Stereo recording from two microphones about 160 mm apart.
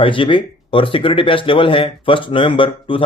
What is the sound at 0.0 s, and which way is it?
A man's voice, 30° left (ahead or behind).